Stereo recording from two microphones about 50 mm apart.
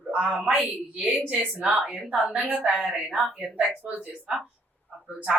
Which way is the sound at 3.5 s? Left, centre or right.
Right.